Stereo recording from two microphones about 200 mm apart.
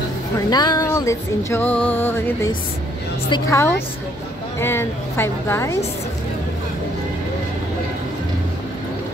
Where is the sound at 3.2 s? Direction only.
20° left (ahead or behind).